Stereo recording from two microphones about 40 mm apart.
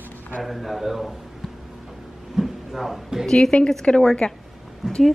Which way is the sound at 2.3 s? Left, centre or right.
Centre.